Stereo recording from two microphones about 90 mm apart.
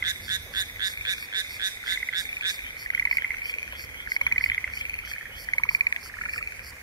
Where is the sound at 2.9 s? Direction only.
50° left (ahead or behind).